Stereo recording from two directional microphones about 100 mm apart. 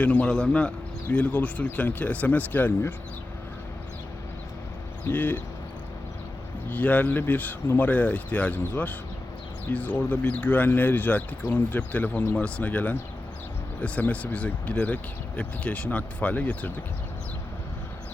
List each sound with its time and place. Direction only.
0.0 s speech: 15° left (ahead or behind)
5.0 s speech: 20° left (ahead or behind)
6.7 s speech: 15° left (ahead or behind)